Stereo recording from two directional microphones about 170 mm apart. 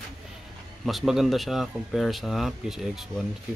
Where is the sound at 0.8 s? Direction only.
Centre (ahead or behind).